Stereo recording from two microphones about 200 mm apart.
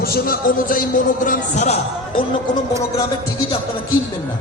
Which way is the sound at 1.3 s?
35° left (ahead or behind).